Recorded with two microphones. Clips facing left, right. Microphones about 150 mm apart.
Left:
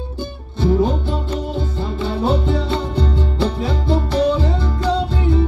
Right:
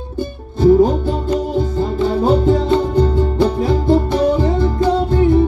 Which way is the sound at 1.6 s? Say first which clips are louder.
Right 6 dB; 45° right (ahead or behind).